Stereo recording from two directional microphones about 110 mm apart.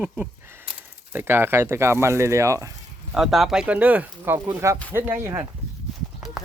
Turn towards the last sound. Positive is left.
turn(degrees=0)  # may be behind; listen again after turning